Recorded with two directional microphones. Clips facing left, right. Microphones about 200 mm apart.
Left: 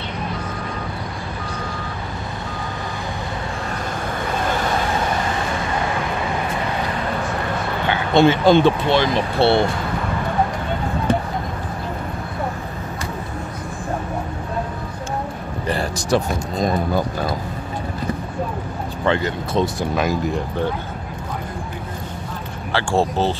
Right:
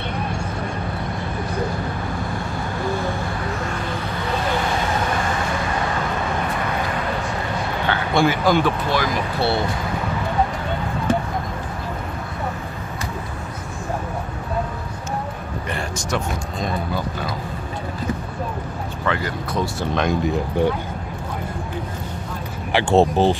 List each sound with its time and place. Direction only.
7.9 s speech: 20° left (ahead or behind)
15.7 s speech: 35° left (ahead or behind)
19.0 s speech: 25° left (ahead or behind)
19.9 s speech: 5° left (ahead or behind)
22.7 s speech: 20° right (ahead or behind)